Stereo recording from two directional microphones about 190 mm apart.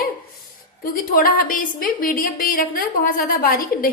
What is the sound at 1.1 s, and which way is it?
A woman's voice, 50° left (ahead or behind).